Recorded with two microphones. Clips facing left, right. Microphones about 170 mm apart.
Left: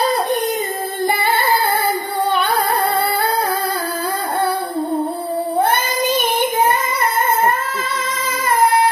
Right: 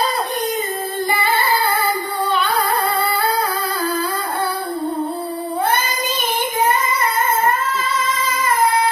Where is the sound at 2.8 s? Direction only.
55° left (ahead or behind).